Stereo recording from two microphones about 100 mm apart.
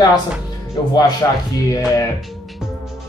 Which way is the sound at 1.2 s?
30° left (ahead or behind).